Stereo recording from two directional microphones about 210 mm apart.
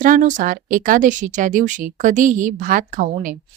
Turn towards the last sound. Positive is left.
turn(degrees=-40)  # may be behind; listen again after turning